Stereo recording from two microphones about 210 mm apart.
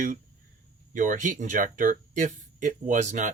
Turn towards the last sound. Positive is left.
turn(degrees=-35)  # may be behind; listen again after turning